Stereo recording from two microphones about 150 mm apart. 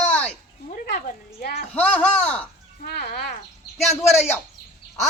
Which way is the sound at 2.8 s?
90° left.